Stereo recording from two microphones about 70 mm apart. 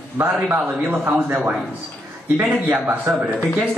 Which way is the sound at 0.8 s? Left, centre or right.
Right.